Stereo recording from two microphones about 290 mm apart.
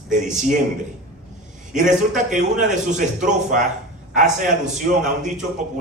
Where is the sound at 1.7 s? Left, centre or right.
Right.